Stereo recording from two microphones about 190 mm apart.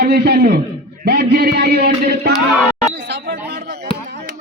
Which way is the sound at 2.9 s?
65° right (ahead or behind).